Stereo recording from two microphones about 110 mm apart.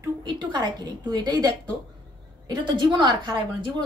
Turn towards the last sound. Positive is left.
turn(degrees=-45)  # may be behind; listen again after turning